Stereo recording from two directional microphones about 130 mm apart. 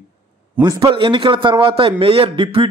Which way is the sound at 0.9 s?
40° right (ahead or behind).